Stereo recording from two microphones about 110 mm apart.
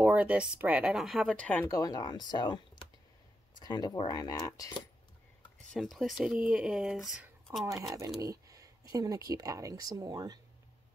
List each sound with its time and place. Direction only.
0.0 s speech: 15° right (ahead or behind)
1.3 s speech: 15° left (ahead or behind)
1.7 s cutlery: 35° left (ahead or behind)
5.7 s speech: centre (ahead or behind)
7.6 s speech: 30° right (ahead or behind)
8.2 s a sound: 30° right (ahead or behind)
8.9 s speech: 35° right (ahead or behind)